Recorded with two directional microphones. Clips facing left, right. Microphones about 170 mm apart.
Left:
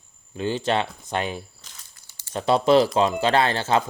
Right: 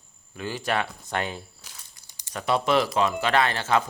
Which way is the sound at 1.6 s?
15° right (ahead or behind).